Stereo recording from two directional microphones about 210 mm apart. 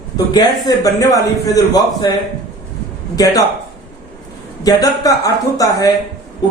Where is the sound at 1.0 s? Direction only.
15° left (ahead or behind).